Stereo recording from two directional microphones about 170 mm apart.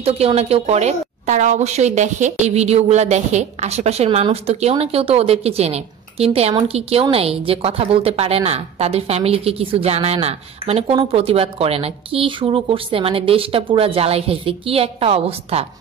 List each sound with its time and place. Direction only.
0.0 s a woman's voice: 35° right (ahead or behind)